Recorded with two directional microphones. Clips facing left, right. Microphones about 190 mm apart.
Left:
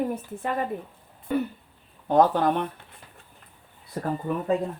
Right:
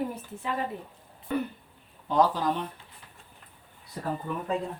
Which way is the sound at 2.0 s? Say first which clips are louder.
Left 5 dB; 55° left (ahead or behind).